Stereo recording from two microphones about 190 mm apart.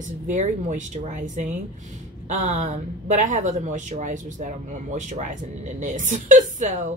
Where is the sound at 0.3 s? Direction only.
40° right (ahead or behind).